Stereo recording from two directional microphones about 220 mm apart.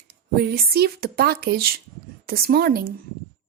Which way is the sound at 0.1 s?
45° right (ahead or behind).